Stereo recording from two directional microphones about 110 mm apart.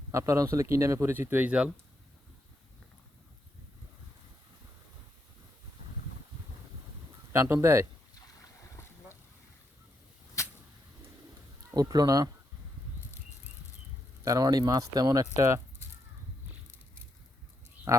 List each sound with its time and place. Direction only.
0.1 s speech: 30° right (ahead or behind); by 1.7 s 10° right (ahead or behind)
7.5 s speech: 25° right (ahead or behind)
11.7 s speech: 35° right (ahead or behind)
14.3 s speech: 35° right (ahead or behind)
17.9 s a sound: 25° right (ahead or behind)